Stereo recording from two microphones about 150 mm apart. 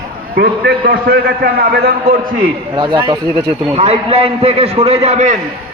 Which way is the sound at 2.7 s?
30° right (ahead or behind).